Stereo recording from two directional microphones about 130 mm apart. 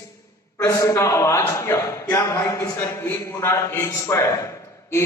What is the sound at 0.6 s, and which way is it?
A man's voice, 25° left (ahead or behind).